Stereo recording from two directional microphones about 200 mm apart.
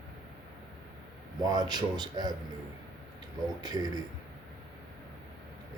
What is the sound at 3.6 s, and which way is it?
Speech, 20° right (ahead or behind).